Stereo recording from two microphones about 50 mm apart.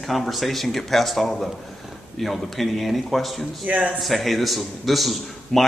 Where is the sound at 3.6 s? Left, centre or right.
Right.